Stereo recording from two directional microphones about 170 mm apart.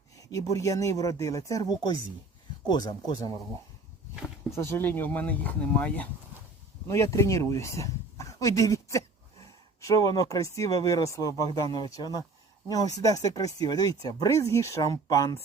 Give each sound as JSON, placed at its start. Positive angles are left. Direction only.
{"t": 0.2, "sound": "speech", "side_deg": 20}
{"t": 4.1, "sound": "a sound", "side_deg": 0}
{"t": 4.5, "sound": "speech", "side_deg": 15}